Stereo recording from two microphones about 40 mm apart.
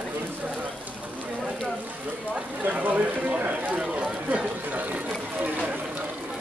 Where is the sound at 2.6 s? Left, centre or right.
Right.